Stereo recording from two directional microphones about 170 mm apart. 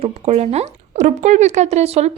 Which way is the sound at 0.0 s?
40° right (ahead or behind).